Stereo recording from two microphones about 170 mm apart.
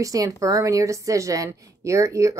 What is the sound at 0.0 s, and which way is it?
A woman's voice, 20° right (ahead or behind).